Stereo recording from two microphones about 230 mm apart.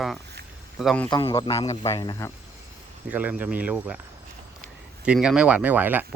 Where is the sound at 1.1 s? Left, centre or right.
Left.